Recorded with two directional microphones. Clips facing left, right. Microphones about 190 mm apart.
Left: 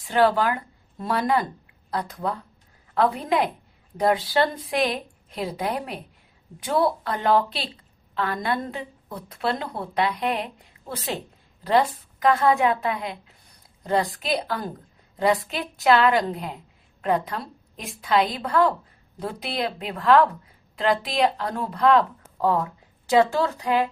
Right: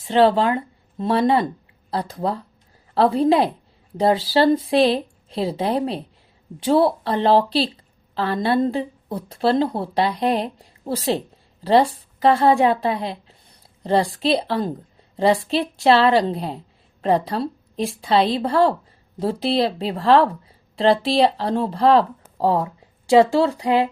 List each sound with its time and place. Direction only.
0.0 s a woman's voice: 25° right (ahead or behind)